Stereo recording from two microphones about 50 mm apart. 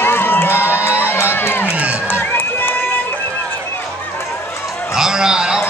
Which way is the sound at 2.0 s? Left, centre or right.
Left.